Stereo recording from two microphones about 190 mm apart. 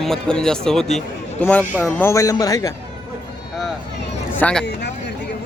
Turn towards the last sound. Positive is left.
turn(degrees=5)  # may be behind; listen again after turning